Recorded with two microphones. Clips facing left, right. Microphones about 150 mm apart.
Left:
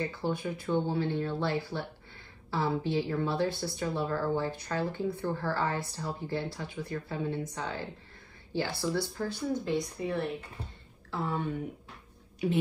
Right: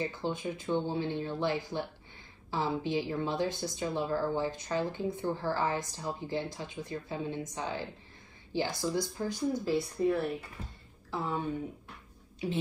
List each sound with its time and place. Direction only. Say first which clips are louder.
0.0 s a woman's voice: left 1 dB; 20° right (ahead or behind); by 10.1 s 5° right (ahead or behind)
11.1 s speech: left 1 dB; 15° right (ahead or behind)